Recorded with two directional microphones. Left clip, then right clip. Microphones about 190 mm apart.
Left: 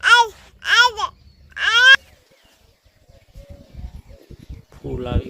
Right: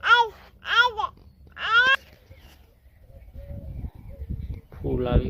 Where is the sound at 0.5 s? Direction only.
20° left (ahead or behind).